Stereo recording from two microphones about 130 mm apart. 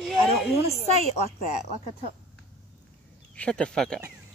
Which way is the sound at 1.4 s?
65° left (ahead or behind).